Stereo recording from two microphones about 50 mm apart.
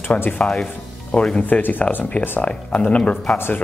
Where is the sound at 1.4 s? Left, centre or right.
Left.